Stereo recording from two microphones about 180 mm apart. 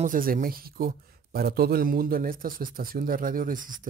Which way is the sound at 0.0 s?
50° right (ahead or behind).